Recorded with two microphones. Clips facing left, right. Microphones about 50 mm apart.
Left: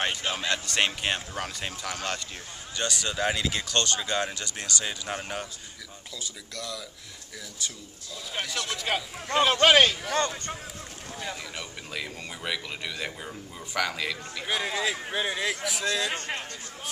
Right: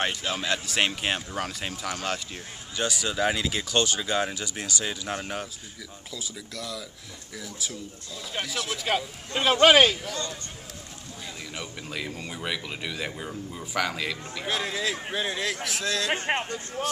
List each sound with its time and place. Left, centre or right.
0.2 s speech: centre
8.3 s speech: centre
10.1 s speech: left
11.5 s speech: centre
16.3 s speech: right